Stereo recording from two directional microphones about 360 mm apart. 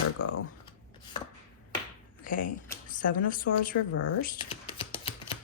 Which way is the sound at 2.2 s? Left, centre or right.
Left.